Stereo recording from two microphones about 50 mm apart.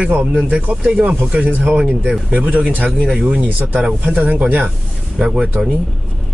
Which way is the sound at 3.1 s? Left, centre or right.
Right.